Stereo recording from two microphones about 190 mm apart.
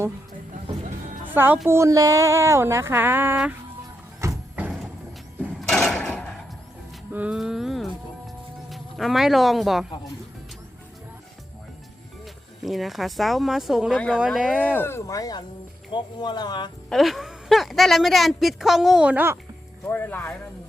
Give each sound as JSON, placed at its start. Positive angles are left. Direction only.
{"t": 1.3, "sound": "speech", "side_deg": -10}
{"t": 4.2, "sound": "a sound", "side_deg": -10}
{"t": 7.1, "sound": "a sound", "side_deg": -5}
{"t": 8.7, "sound": "speech", "side_deg": 0}
{"t": 12.2, "sound": "a woman's voice", "side_deg": 0}
{"t": 14.6, "sound": "speech", "side_deg": 10}
{"t": 16.9, "sound": "a woman's voice", "side_deg": 0}
{"t": 19.9, "sound": "speech", "side_deg": 10}